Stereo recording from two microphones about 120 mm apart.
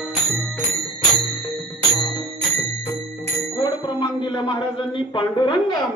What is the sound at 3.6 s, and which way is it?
A woman's voice, 40° left (ahead or behind).